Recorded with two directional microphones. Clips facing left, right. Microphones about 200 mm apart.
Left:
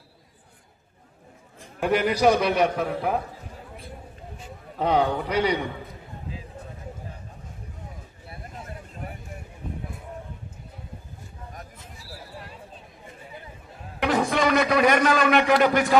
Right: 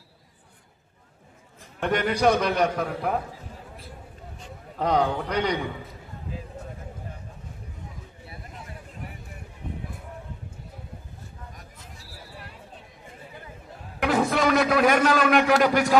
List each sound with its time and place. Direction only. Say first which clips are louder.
1.8 s a man's voice: left 2 dB; 10° left (ahead or behind)
4.4 s a man's voice: left 1 dB; 5° left (ahead or behind)
8.3 s a sound: left 4 dB; 50° left (ahead or behind)
14.0 s a man's voice: even; centre (ahead or behind)